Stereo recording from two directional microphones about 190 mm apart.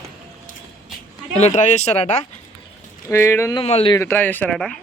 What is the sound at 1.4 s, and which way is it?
Speech, 35° left (ahead or behind).